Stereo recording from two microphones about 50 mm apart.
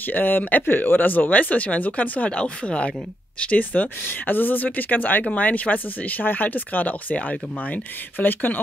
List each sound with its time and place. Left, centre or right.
0.0 s speech: left